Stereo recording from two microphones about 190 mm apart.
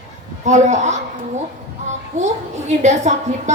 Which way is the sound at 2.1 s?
40° right (ahead or behind).